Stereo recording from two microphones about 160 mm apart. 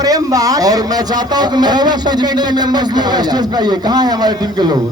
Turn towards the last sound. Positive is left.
turn(degrees=-25)  # may be behind; listen again after turning